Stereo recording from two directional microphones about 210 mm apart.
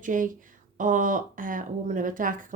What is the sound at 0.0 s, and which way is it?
Speech, 40° right (ahead or behind).